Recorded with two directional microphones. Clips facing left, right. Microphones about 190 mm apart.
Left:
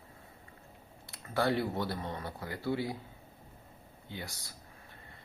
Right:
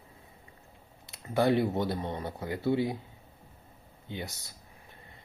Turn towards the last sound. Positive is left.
turn(degrees=-20)  # may be behind; listen again after turning